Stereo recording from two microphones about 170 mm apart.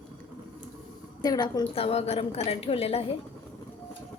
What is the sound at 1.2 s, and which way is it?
A woman's voice, 25° left (ahead or behind).